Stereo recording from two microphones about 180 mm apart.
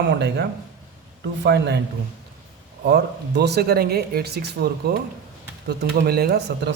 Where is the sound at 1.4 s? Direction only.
70° right (ahead or behind).